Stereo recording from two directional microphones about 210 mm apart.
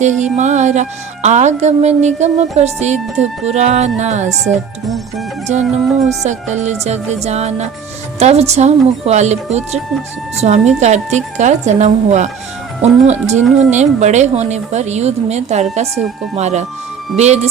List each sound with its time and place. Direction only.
0.0 s music: 35° right (ahead or behind)
5.5 s music: 35° right (ahead or behind)